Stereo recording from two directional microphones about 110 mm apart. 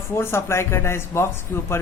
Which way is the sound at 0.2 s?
25° left (ahead or behind).